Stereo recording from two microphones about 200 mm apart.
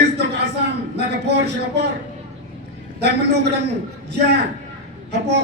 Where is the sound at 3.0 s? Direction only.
60° right (ahead or behind).